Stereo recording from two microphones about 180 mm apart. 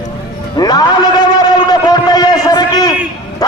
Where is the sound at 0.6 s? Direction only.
20° left (ahead or behind).